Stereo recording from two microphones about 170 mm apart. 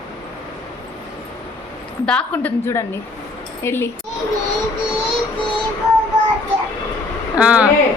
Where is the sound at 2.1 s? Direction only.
10° left (ahead or behind).